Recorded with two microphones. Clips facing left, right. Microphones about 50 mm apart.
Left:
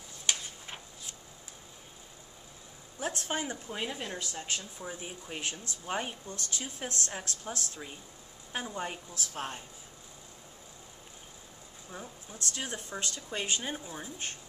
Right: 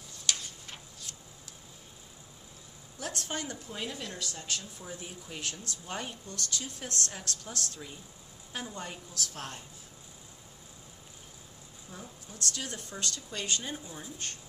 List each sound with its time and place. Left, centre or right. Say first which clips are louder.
0.3 s a sound: left 1 dB; centre
3.0 s speech: left 3 dB; left
11.9 s speech: left 2 dB; left